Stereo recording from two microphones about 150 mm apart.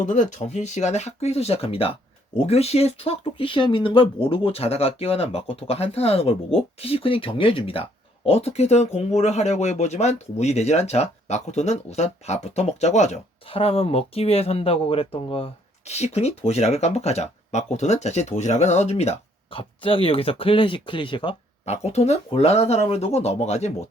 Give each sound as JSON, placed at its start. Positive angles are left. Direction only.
{"t": 0.0, "sound": "speech", "side_deg": 55}
{"t": 21.6, "sound": "speech", "side_deg": 45}